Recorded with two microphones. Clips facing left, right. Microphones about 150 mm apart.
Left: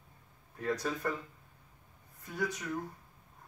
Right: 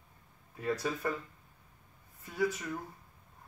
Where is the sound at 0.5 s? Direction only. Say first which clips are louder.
Even; 5° right (ahead or behind).